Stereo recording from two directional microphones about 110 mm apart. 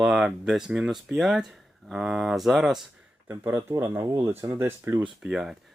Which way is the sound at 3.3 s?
25° right (ahead or behind).